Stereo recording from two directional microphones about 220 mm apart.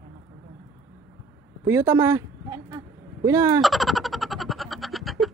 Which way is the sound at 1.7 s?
10° right (ahead or behind).